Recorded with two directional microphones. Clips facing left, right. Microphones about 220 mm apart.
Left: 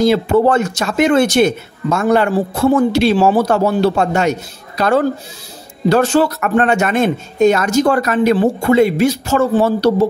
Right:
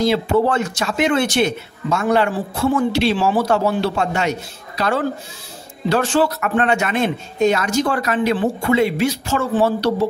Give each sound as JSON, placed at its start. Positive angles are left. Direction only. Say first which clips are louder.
{"t": 0.0, "sound": "speech", "louder": "left 4 dB", "side_deg": 45}